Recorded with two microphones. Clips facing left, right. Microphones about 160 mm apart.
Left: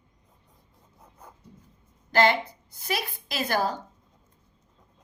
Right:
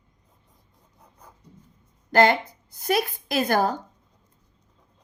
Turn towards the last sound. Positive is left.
turn(degrees=-50)  # may be behind; listen again after turning